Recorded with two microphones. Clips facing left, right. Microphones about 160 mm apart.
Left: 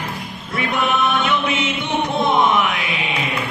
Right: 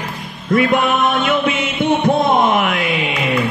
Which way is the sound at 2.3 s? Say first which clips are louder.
Right 2 dB; 50° right (ahead or behind).